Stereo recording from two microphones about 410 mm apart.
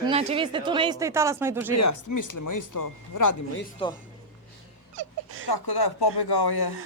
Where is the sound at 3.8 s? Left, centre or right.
Centre.